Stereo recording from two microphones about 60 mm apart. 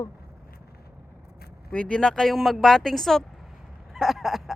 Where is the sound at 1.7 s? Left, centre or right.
Left; by 3.2 s centre.